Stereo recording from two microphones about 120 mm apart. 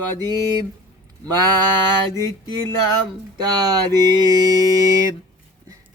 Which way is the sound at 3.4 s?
30° right (ahead or behind).